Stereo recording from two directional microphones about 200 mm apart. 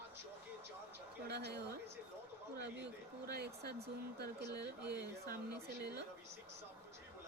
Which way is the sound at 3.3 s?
55° right (ahead or behind).